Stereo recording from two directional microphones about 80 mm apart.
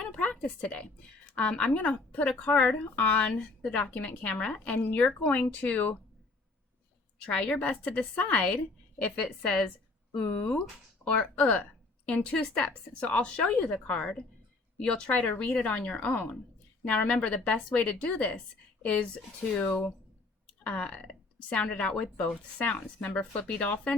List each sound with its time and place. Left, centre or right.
0.0 s a sound: centre
1.4 s a woman's voice: centre
7.3 s a woman's voice: centre
10.2 s a woman's voice: left
20.7 s a woman's voice: centre